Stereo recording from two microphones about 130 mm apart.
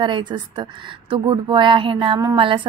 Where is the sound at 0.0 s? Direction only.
35° right (ahead or behind).